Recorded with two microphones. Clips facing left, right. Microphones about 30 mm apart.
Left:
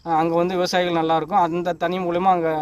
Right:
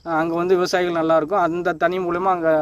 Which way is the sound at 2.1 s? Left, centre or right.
Left.